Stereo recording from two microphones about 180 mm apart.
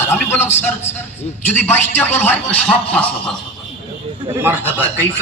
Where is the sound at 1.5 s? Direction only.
10° left (ahead or behind).